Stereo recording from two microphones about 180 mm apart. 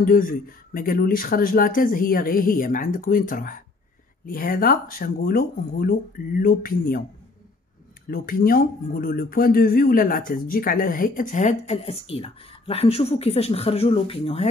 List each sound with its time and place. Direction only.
0.0 s speech: 50° left (ahead or behind)
8.1 s speech: 55° left (ahead or behind); by 14.5 s 30° left (ahead or behind)